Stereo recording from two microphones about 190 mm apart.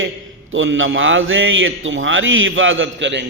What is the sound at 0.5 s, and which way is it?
A man's voice, 90° right.